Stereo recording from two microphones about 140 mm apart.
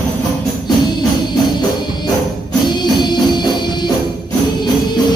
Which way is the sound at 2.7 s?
30° left (ahead or behind).